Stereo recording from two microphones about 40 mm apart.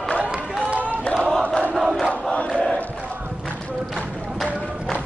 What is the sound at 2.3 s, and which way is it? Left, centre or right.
Crowd, left.